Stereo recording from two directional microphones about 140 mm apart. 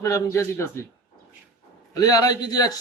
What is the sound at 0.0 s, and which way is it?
Speech, 20° left (ahead or behind).